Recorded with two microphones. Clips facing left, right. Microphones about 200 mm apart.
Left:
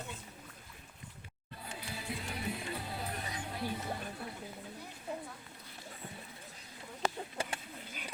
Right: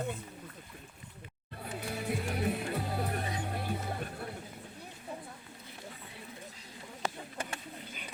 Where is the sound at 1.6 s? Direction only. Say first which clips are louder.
Right 7 dB; 55° right (ahead or behind).